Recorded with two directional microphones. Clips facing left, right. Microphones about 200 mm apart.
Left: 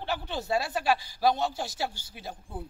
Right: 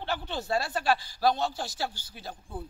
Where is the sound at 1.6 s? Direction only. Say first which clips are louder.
Left 1 dB; 20° left (ahead or behind).